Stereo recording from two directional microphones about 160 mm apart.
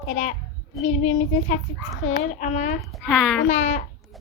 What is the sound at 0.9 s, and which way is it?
A child's voice, 50° left (ahead or behind).